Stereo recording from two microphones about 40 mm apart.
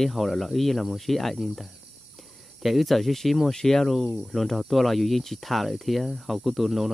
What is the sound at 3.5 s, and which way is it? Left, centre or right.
Cricket, centre.